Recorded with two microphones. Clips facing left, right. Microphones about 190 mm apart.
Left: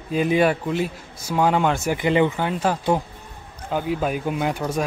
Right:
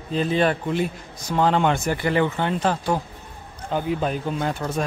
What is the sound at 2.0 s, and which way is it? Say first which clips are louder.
A man's voice: left 2 dB; 15° left (ahead or behind).